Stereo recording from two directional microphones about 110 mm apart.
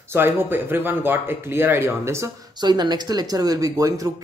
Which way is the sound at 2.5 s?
40° right (ahead or behind).